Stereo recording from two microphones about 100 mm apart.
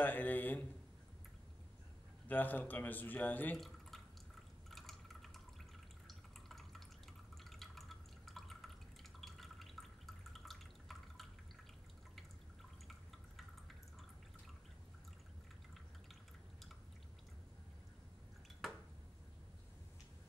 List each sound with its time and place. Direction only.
0.0 s speech: 15° left (ahead or behind)
2.2 s speech: 20° left (ahead or behind)
3.5 s drip: centre (ahead or behind)